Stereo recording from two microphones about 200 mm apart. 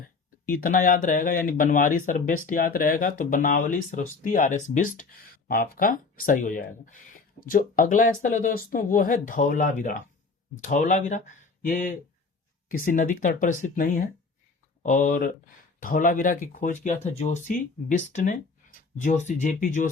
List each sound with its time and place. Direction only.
0.6 s speech: 40° left (ahead or behind)